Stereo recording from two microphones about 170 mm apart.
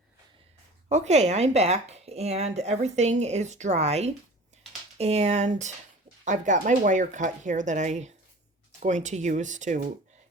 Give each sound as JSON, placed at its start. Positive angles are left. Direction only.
{"t": 0.9, "sound": "speech", "side_deg": -40}